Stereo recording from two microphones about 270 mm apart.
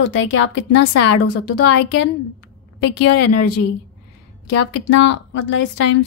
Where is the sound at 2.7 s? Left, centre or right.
Left.